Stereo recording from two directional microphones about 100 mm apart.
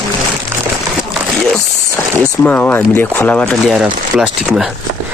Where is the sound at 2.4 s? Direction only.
20° left (ahead or behind).